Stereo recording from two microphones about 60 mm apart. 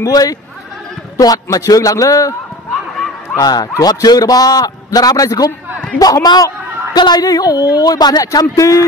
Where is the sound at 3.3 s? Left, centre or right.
Left.